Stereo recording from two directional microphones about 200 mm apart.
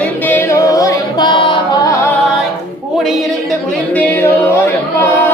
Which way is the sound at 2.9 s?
Centre (ahead or behind).